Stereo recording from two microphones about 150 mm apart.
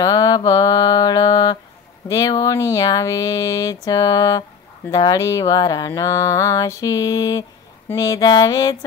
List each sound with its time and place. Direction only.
0.0 s speech: 25° left (ahead or behind)